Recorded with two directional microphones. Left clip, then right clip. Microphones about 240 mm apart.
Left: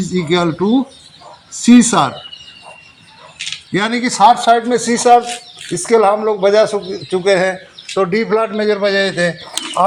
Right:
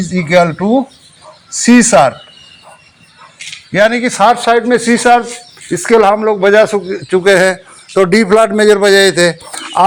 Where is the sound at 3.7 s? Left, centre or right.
Right.